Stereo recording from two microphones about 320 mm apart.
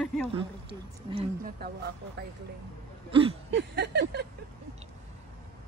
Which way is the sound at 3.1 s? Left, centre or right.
Centre.